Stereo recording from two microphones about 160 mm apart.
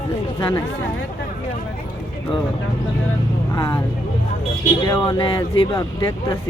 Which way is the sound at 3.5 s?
20° left (ahead or behind).